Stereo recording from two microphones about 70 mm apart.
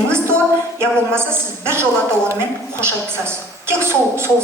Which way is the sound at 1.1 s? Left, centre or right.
Right.